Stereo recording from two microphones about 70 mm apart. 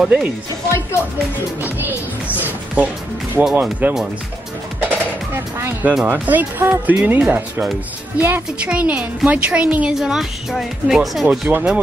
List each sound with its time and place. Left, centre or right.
0.0 s a woman's voice: centre
1.6 s a woman's voice: right
4.7 s music: right
6.0 s a woman's voice: right
9.9 s speech: centre
11.2 s a woman's voice: centre